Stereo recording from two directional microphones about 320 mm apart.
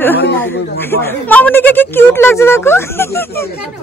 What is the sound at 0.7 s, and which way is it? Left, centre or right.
Speech, centre.